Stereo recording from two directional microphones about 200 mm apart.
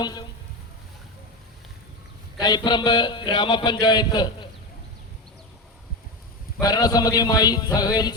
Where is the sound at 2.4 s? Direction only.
20° left (ahead or behind).